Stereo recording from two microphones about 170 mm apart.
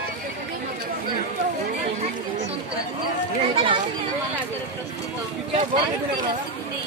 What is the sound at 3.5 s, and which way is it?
Chatter, 30° right (ahead or behind).